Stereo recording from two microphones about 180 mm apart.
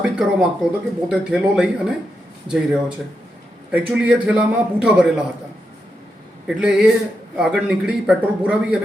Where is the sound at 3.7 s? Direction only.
5° right (ahead or behind).